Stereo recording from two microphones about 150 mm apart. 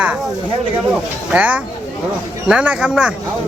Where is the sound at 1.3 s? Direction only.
10° right (ahead or behind).